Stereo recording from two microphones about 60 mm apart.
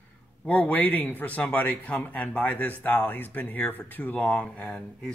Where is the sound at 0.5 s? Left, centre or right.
Left.